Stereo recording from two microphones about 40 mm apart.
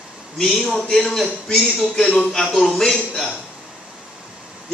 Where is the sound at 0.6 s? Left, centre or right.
Centre.